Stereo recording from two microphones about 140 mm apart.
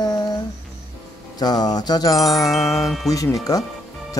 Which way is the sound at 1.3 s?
30° left (ahead or behind).